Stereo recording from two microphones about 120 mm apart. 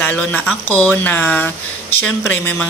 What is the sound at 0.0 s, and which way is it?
Speech, 15° left (ahead or behind).